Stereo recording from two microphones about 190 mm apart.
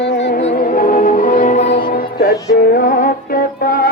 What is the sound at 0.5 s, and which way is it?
Music, 50° left (ahead or behind).